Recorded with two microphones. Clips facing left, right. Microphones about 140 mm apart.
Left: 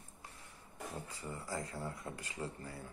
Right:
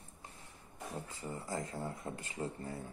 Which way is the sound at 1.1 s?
25° right (ahead or behind).